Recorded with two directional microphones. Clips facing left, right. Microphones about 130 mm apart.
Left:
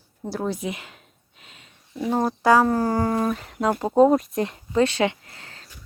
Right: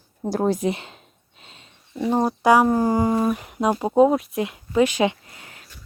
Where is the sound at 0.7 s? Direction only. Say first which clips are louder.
Right 3 dB; 25° right (ahead or behind).